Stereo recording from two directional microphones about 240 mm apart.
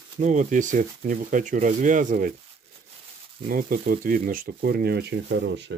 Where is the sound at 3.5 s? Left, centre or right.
Right.